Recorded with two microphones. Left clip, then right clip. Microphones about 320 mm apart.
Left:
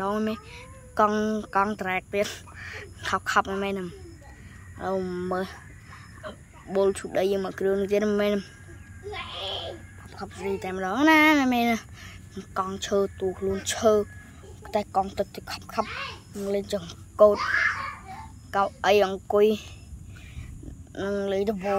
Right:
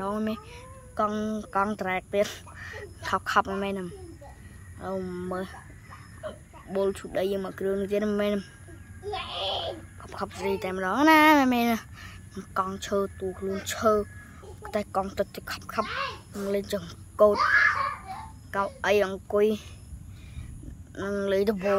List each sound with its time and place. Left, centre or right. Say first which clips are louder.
0.0 s speech: left 3 dB; centre
9.1 s a sound: right 2 dB; right
10.0 s a sound: right 5 dB; centre
10.4 s speech: even; centre
15.8 s speech: even; right
16.4 s speech: left 1 dB; centre
18.5 s speech: left 3 dB; centre
20.9 s speech: even; centre